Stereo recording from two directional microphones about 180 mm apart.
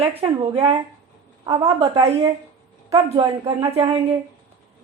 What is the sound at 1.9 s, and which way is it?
Speech, 20° right (ahead or behind).